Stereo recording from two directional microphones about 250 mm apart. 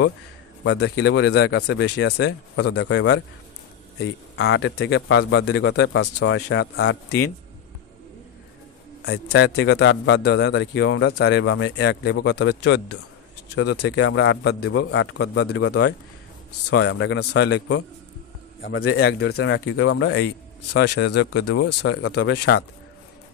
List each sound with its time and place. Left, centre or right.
0.7 s a man's voice: left
9.0 s a man's voice: left
16.7 s a man's voice: left
18.6 s speech: left
18.9 s speech: left
19.3 s a man's voice: left
21.6 s speech: left
22.1 s a man's voice: left